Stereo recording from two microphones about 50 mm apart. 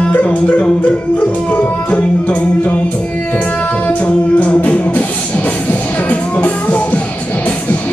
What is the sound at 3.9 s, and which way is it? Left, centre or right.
Music, left.